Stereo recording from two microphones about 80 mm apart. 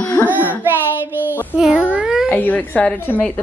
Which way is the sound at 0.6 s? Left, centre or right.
Right.